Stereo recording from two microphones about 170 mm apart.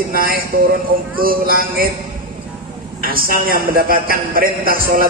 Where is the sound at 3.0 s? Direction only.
60° right (ahead or behind).